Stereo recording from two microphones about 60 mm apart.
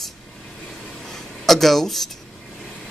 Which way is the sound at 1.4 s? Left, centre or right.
Centre.